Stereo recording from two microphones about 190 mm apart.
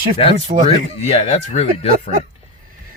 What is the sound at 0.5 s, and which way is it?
Speech, 40° right (ahead or behind).